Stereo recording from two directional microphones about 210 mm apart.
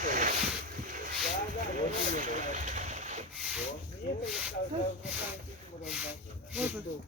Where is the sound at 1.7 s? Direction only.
35° right (ahead or behind).